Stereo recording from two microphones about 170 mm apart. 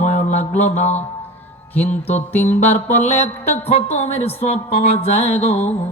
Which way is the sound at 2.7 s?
40° left (ahead or behind).